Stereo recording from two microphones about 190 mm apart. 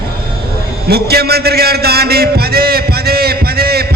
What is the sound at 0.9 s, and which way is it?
A man's voice, 55° right (ahead or behind).